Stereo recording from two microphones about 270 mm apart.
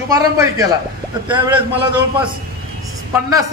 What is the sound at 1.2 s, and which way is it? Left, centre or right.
A man's voice, centre.